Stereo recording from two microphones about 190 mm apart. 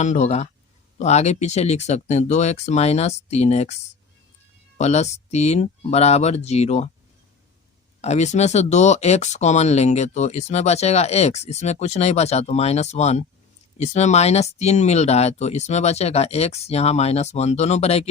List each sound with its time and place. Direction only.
0.0 s speech: 40° left (ahead or behind)
4.8 s speech: 35° left (ahead or behind)
8.0 s speech: 35° left (ahead or behind)